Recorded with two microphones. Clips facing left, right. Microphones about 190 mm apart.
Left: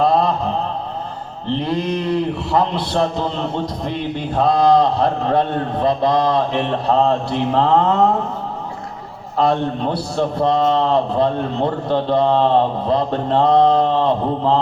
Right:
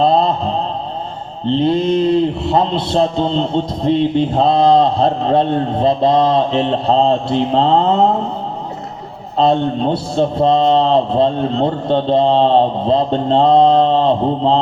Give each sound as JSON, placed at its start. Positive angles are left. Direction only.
{"t": 0.0, "sound": "a sound", "side_deg": -25}
{"t": 1.5, "sound": "a man's voice", "side_deg": -25}
{"t": 9.4, "sound": "a man's voice", "side_deg": -25}